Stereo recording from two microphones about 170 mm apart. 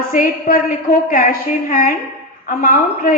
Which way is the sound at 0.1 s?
50° left (ahead or behind).